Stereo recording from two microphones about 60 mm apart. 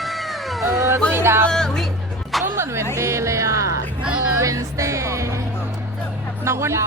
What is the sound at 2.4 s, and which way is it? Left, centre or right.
Music, right.